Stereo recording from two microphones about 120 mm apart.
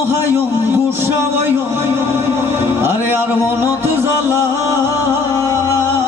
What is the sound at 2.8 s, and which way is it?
Music, 20° right (ahead or behind).